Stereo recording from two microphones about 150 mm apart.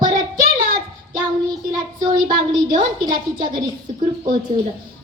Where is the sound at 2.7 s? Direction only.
60° right (ahead or behind).